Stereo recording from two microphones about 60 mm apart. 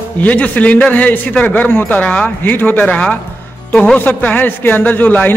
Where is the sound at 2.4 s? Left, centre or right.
Left.